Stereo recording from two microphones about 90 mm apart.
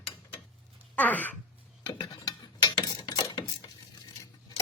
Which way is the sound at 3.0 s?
55° left (ahead or behind).